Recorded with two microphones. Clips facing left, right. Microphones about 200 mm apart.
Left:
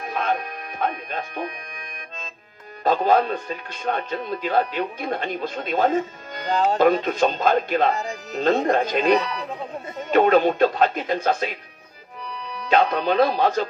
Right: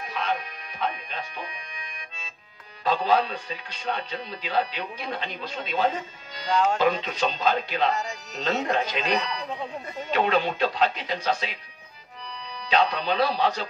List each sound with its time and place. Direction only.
0.0 s music: 50° left (ahead or behind)
2.8 s speech: 50° left (ahead or behind)
12.6 s speech: 50° left (ahead or behind)